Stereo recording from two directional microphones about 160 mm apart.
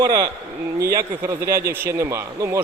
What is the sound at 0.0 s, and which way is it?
Speech, 25° right (ahead or behind).